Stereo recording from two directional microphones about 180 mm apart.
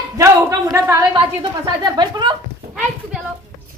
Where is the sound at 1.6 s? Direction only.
20° right (ahead or behind).